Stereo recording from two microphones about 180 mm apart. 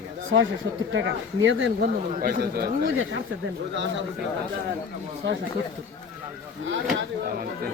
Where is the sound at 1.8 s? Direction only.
55° right (ahead or behind); by 3.2 s 75° right (ahead or behind).